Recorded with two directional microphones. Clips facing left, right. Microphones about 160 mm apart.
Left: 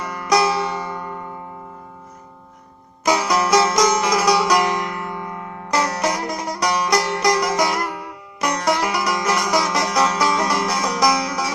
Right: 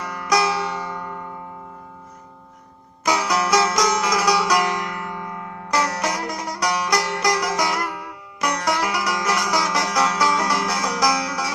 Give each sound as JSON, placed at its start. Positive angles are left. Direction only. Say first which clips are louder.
{"t": 0.0, "sound": "music", "louder": "left 3 dB", "side_deg": 30}
{"t": 3.0, "sound": "music", "louder": "left 3 dB", "side_deg": 25}